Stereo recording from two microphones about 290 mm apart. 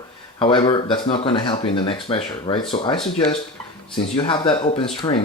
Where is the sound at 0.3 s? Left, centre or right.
Centre.